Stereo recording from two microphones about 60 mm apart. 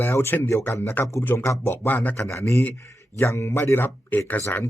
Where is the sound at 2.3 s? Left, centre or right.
Left.